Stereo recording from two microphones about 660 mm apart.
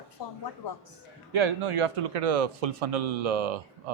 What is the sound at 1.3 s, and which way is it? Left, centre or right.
Speech, right.